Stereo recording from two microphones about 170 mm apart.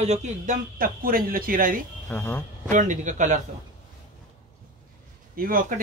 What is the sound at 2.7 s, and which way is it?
Speech, 45° right (ahead or behind).